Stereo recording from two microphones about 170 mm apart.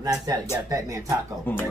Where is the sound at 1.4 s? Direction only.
10° left (ahead or behind).